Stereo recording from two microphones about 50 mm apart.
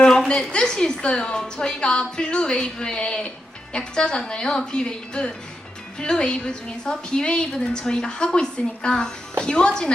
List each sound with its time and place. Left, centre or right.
0.0 s a woman's voice: centre